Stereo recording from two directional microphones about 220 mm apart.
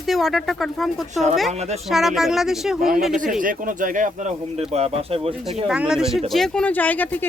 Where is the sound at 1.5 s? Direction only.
30° right (ahead or behind).